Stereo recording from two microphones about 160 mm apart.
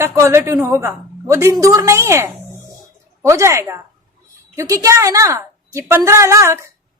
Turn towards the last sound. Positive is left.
turn(degrees=-15)  # may be behind; listen again after turning